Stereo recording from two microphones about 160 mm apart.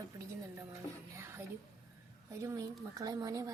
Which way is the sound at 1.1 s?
15° right (ahead or behind).